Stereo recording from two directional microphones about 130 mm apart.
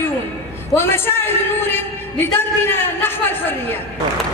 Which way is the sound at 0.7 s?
15° left (ahead or behind).